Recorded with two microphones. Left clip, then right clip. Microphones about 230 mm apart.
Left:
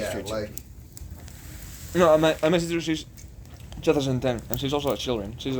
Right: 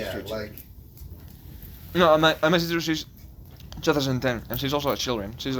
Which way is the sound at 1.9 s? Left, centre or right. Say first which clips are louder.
Even; centre.